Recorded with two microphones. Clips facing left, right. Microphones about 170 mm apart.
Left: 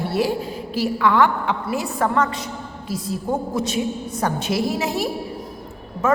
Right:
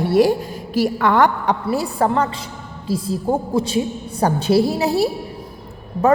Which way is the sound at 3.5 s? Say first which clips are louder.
Right 3 dB; 30° right (ahead or behind).